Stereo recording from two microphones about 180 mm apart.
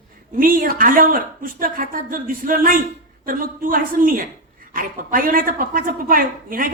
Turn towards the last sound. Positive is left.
turn(degrees=-50)  # may be behind; listen again after turning